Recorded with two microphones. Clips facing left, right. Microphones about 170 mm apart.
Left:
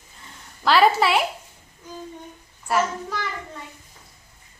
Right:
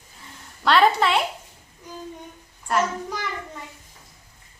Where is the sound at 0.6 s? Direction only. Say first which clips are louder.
Left 1 dB; centre (ahead or behind).